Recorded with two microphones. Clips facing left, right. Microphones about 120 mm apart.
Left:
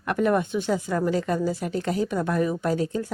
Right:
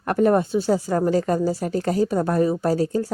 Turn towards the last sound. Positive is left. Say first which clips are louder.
# right 4 dB
turn(degrees=-40)  # may be behind; listen again after turning